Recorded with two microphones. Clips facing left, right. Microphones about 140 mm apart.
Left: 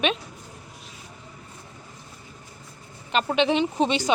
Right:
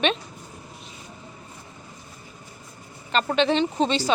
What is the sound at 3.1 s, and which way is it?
Speech, 10° left (ahead or behind).